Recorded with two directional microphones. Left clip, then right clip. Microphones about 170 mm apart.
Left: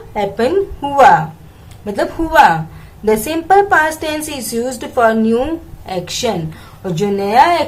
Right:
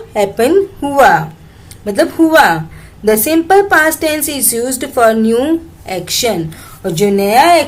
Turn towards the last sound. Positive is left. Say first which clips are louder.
# right 3 dB
turn(degrees=-40)  # may be behind; listen again after turning